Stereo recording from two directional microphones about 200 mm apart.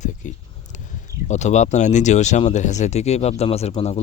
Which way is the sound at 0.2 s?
40° left (ahead or behind).